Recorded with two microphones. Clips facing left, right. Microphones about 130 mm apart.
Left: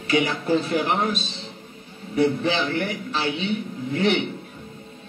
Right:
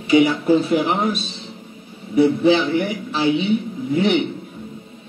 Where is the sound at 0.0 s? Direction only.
15° right (ahead or behind).